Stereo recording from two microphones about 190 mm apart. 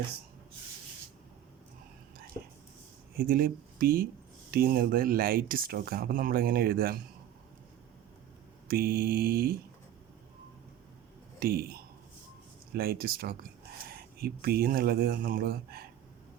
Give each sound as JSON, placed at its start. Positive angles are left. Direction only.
{"t": 2.3, "sound": "whispering", "side_deg": 30}
{"t": 3.2, "sound": "speech", "side_deg": -50}
{"t": 8.6, "sound": "speech", "side_deg": -50}
{"t": 11.3, "sound": "speech", "side_deg": -55}